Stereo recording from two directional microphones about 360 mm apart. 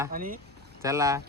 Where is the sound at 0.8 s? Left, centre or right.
Centre.